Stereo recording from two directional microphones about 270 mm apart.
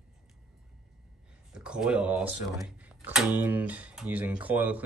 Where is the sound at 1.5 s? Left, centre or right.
Centre.